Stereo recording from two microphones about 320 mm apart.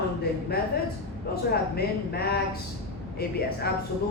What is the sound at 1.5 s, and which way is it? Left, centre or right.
Speech, left.